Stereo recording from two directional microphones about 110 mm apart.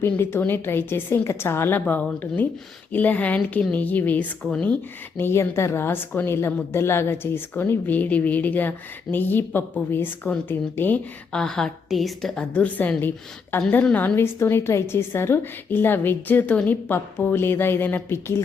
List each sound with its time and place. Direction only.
0.0 s a woman's voice: 20° left (ahead or behind)
11.3 s a woman's voice: 5° left (ahead or behind); by 18.4 s 20° left (ahead or behind)